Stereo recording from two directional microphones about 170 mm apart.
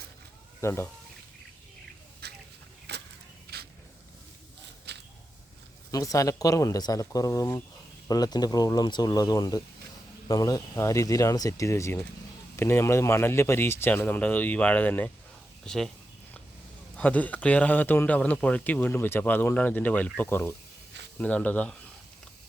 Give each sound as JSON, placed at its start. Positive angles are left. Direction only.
{"t": 0.6, "sound": "a man's voice", "side_deg": 15}
{"t": 2.2, "sound": "chicken", "side_deg": -70}
{"t": 2.9, "sound": "a sound", "side_deg": -80}
{"t": 4.9, "sound": "a sound", "side_deg": -80}
{"t": 5.9, "sound": "a man's voice", "side_deg": 20}
{"t": 17.0, "sound": "a man's voice", "side_deg": 10}